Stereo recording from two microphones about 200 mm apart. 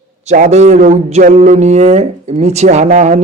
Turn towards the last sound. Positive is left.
turn(degrees=-35)  # may be behind; listen again after turning